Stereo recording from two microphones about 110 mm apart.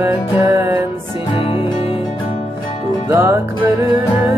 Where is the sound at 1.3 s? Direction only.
55° left (ahead or behind).